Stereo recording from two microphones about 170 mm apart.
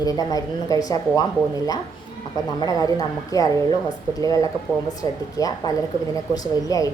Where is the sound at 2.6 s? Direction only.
20° left (ahead or behind).